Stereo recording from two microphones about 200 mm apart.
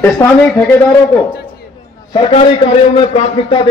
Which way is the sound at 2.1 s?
30° left (ahead or behind).